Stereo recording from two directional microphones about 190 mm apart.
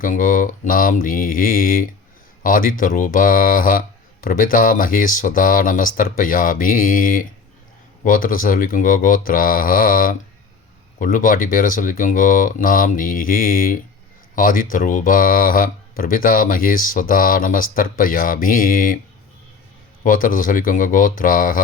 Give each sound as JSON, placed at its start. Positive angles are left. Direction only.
{"t": 0.0, "sound": "speech", "side_deg": 45}
{"t": 20.1, "sound": "speech", "side_deg": 45}